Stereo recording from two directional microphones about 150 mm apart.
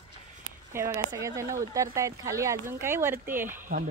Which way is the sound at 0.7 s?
20° right (ahead or behind).